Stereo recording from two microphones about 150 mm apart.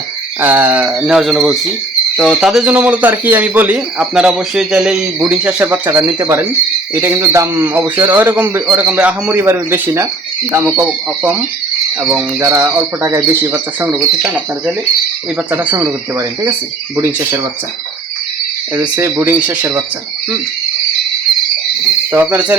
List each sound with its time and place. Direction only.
0.4 s speech: 10° right (ahead or behind)
15.5 s speech: 10° right (ahead or behind)
18.8 s speech: 10° right (ahead or behind)
22.1 s speech: 10° right (ahead or behind)